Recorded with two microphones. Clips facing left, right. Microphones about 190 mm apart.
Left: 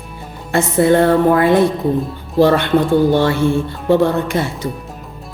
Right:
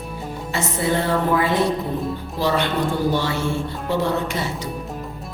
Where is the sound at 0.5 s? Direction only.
55° left (ahead or behind).